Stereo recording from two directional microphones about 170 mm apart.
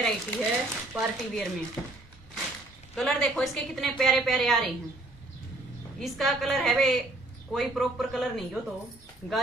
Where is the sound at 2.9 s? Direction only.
5° left (ahead or behind).